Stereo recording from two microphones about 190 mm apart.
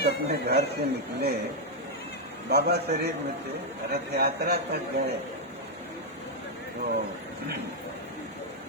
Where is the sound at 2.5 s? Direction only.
55° right (ahead or behind).